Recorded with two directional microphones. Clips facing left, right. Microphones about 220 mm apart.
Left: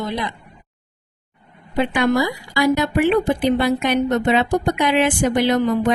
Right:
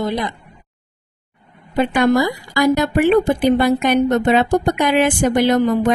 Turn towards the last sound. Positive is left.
turn(degrees=-45)  # may be behind; listen again after turning